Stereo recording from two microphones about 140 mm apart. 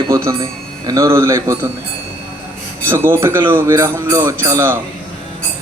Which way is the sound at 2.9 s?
15° right (ahead or behind).